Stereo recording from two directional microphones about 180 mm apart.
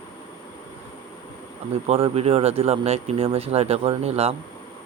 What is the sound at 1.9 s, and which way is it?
Speech, 30° right (ahead or behind).